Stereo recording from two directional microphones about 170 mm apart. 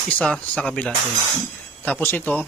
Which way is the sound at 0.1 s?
10° left (ahead or behind).